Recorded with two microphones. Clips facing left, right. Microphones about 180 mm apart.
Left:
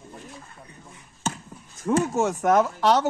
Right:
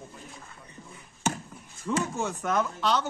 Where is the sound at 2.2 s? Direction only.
80° left.